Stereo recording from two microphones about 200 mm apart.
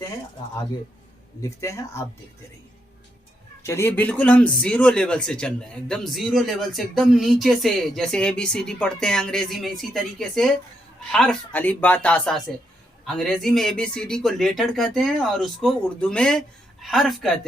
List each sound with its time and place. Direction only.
1.4 s speech: 15° left (ahead or behind)
3.6 s speech: 15° left (ahead or behind)